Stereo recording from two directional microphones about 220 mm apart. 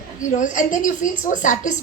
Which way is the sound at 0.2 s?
35° left (ahead or behind).